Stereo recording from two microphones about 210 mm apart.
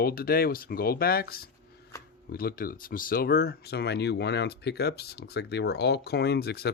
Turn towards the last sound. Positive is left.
turn(degrees=50)  # may be behind; listen again after turning